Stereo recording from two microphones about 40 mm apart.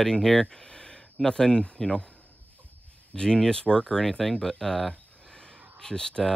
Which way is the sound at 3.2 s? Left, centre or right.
Centre.